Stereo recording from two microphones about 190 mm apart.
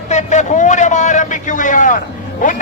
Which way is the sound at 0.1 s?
40° left (ahead or behind).